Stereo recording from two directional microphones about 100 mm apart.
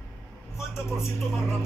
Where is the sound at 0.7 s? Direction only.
25° left (ahead or behind).